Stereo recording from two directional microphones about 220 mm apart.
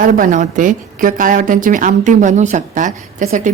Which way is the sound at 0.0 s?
35° right (ahead or behind).